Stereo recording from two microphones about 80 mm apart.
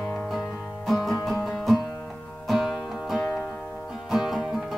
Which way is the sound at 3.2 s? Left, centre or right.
Left.